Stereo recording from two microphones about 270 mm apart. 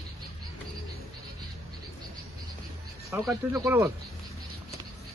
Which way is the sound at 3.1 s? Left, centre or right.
Centre.